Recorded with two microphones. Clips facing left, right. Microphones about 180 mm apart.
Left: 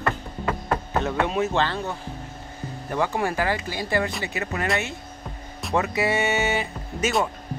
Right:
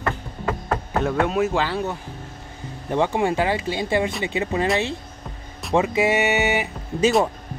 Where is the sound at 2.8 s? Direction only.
20° right (ahead or behind).